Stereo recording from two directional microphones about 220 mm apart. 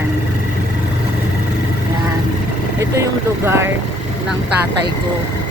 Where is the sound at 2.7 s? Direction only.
15° right (ahead or behind).